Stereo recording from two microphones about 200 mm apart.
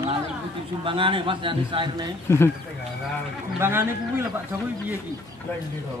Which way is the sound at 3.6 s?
10° right (ahead or behind).